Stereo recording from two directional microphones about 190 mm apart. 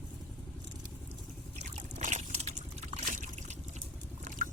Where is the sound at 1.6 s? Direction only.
40° right (ahead or behind).